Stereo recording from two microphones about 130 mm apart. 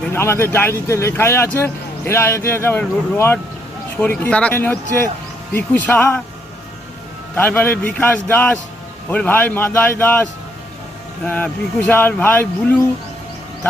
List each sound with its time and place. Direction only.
0.1 s speech: 20° left (ahead or behind)
7.3 s speech: 15° left (ahead or behind)